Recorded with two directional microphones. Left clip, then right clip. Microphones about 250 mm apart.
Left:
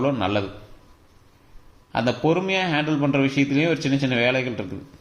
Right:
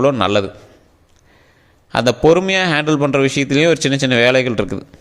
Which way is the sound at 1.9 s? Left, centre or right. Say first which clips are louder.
Right 9 dB; right.